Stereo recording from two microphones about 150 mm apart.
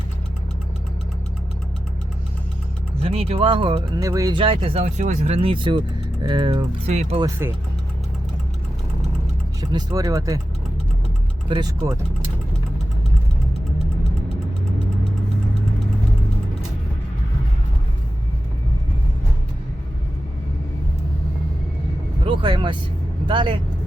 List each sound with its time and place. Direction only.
3.0 s speech: 40° right (ahead or behind)
6.8 s speech: 45° right (ahead or behind)
9.6 s speech: 25° right (ahead or behind)
11.4 s speech: 35° right (ahead or behind)
22.2 s vehicle: 35° right (ahead or behind)
23.2 s a man's voice: 35° right (ahead or behind)